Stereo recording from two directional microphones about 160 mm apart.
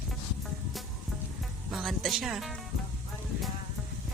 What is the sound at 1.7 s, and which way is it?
Speech, centre (ahead or behind).